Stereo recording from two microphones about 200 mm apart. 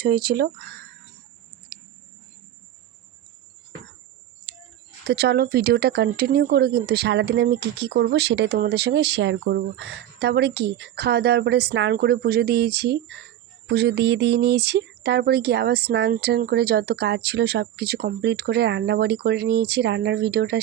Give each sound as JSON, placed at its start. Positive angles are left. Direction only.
{"t": 0.0, "sound": "speech", "side_deg": -45}
{"t": 1.7, "sound": "a sound", "side_deg": -50}
{"t": 5.0, "sound": "speech", "side_deg": -55}